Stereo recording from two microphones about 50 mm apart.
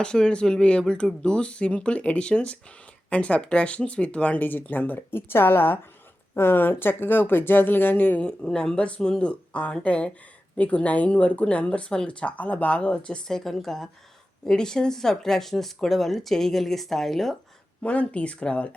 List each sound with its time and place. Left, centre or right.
0.0 s speech: centre
4.4 s speech: left
8.1 s speech: centre
13.2 s speech: centre
17.8 s speech: left